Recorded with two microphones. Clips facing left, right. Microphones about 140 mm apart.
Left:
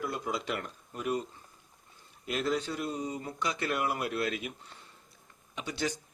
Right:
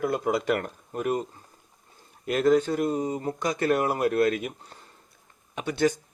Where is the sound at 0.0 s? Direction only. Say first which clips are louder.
Right 9 dB; 55° right (ahead or behind).